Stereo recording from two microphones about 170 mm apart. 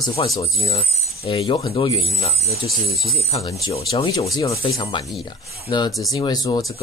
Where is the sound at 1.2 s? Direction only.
35° left (ahead or behind).